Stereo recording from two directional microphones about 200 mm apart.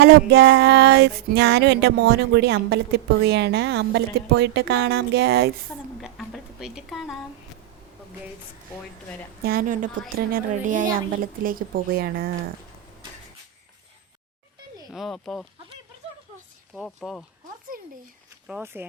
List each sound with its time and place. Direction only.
0.0 s music: 55° right (ahead or behind)
6.0 s a sound: centre (ahead or behind)
9.4 s a woman's voice: 50° right (ahead or behind)
14.9 s speech: centre (ahead or behind)
16.7 s speech: centre (ahead or behind)
17.7 s a woman's voice: 45° right (ahead or behind)
18.4 s speech: 10° right (ahead or behind)